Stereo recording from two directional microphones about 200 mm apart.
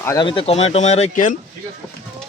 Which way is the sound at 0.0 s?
15° left (ahead or behind).